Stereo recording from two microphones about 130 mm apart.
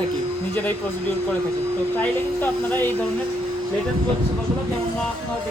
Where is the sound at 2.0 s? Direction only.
15° left (ahead or behind).